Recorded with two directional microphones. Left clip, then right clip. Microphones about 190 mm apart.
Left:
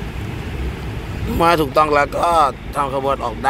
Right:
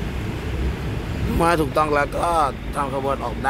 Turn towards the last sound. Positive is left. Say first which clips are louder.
# left 4 dB
turn(degrees=10)  # may be behind; listen again after turning